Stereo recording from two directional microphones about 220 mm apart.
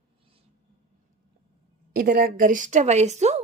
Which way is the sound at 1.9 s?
40° right (ahead or behind).